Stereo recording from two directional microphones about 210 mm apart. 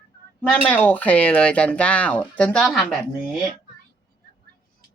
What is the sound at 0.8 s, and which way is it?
Speech, 5° left (ahead or behind).